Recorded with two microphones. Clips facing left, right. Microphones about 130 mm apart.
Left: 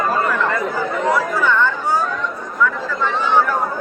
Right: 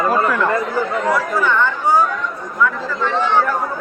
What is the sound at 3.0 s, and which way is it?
Speech, 5° left (ahead or behind).